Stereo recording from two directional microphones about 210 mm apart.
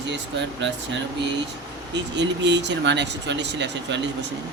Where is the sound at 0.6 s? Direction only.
60° right (ahead or behind).